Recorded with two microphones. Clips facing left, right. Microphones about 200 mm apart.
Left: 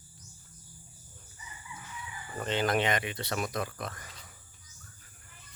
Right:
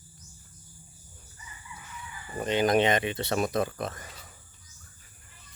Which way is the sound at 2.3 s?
15° right (ahead or behind).